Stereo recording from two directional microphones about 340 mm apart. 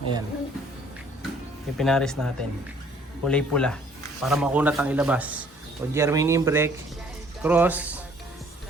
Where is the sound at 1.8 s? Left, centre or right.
Centre.